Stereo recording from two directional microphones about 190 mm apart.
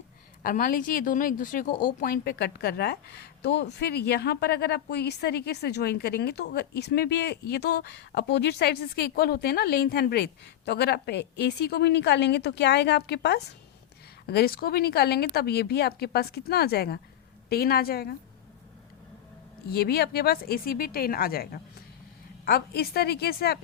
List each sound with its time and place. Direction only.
0.4 s a woman's voice: 45° left (ahead or behind)
19.6 s a woman's voice: 55° left (ahead or behind)